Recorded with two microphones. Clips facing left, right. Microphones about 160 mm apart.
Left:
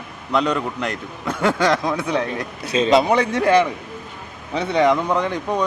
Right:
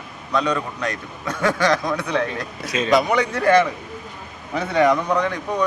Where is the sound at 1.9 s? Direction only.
25° left (ahead or behind).